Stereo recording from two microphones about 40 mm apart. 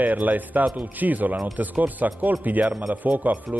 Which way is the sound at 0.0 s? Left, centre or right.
Right.